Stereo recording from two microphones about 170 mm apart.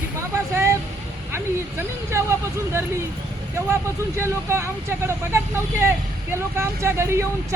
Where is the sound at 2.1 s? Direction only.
15° right (ahead or behind).